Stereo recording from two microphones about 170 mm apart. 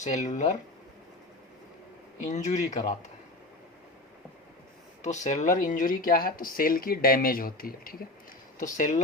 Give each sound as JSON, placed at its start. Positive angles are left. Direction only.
{"t": 0.0, "sound": "speech", "side_deg": 45}
{"t": 2.2, "sound": "speech", "side_deg": 45}
{"t": 5.0, "sound": "speech", "side_deg": 45}
{"t": 8.5, "sound": "speech", "side_deg": 50}